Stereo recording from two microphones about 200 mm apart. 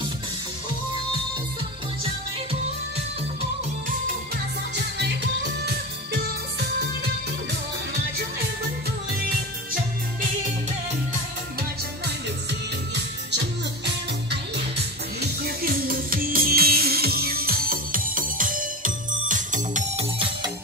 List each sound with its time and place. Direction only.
4.7 s music: 60° right (ahead or behind)
15.1 s music: 50° right (ahead or behind)